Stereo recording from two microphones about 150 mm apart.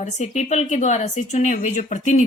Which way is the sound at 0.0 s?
50° left (ahead or behind).